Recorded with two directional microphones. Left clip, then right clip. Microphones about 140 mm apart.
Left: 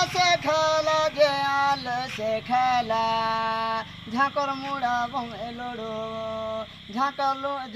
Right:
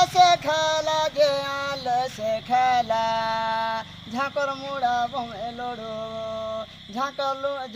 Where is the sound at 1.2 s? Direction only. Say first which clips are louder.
Left 2 dB; 30° right (ahead or behind).